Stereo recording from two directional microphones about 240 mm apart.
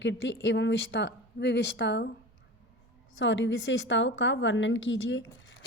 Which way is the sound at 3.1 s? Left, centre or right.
Left.